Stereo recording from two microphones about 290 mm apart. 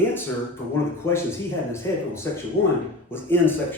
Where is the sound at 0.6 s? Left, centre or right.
Left.